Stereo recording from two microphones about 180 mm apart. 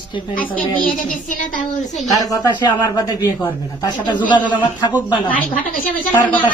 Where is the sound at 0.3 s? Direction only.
10° left (ahead or behind).